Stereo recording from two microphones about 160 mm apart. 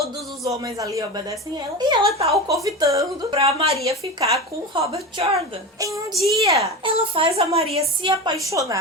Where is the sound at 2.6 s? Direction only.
20° right (ahead or behind).